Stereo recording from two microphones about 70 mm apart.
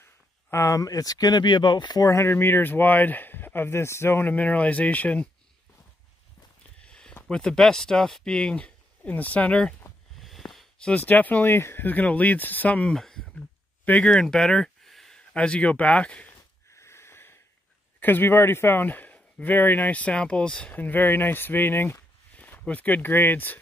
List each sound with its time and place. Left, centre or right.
0.0 s a sound: left
0.7 s speech: left
2.0 s speech: left
6.9 s a sound: centre
7.2 s speech: centre
10.1 s a sound: centre
10.9 s speech: left
12.9 s speech: centre
13.8 s speech: centre
14.2 s a sound: centre
15.3 s speech: centre
16.7 s wheeze: left
18.0 s speech: left; by 20.7 s centre
20.7 s speech: left